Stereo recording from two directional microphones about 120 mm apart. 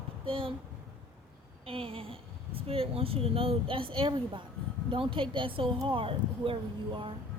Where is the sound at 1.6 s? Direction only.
50° right (ahead or behind).